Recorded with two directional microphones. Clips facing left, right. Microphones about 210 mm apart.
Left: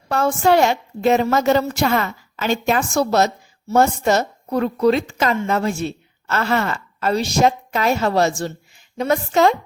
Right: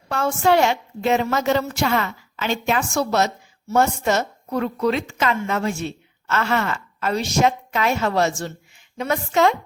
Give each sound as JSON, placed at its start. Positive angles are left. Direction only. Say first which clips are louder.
{"t": 0.1, "sound": "a woman's voice", "louder": "left 2 dB", "side_deg": 40}